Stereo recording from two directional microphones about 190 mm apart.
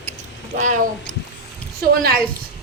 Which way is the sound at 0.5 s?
40° right (ahead or behind).